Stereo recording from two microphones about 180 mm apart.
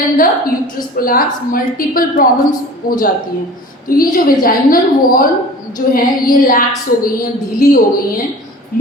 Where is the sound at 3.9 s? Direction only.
50° left (ahead or behind).